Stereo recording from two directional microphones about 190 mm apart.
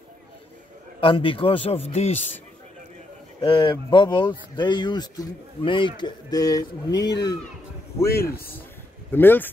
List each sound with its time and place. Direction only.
1.0 s speech: 25° left (ahead or behind)
3.3 s speech: 25° left (ahead or behind)
8.1 s a man's voice: 55° left (ahead or behind)
9.1 s speech: 10° left (ahead or behind)